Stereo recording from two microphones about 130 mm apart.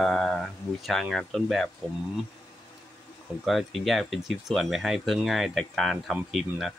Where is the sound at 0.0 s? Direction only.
Centre (ahead or behind).